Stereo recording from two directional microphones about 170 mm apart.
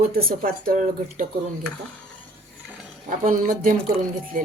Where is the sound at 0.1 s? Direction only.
60° right (ahead or behind).